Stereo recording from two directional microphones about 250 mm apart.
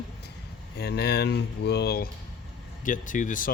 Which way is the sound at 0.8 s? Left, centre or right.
Left.